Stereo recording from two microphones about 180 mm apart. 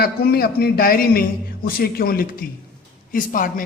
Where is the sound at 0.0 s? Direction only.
60° left (ahead or behind).